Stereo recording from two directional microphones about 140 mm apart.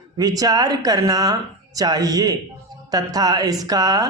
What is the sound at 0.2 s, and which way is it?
Speech, 25° right (ahead or behind).